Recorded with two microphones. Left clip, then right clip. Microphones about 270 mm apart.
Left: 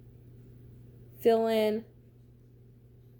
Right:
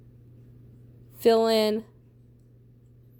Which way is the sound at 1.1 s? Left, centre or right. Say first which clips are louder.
Right 4 dB; right.